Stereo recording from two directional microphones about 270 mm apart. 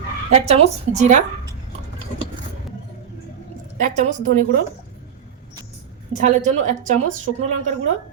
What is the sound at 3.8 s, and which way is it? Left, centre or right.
Speech, right.